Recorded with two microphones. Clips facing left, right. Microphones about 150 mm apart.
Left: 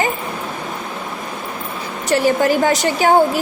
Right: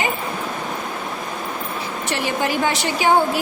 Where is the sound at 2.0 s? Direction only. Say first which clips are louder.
Left 8 dB; 40° left (ahead or behind).